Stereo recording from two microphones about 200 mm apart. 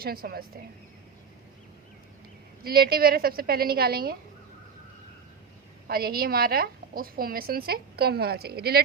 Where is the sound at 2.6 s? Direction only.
50° right (ahead or behind).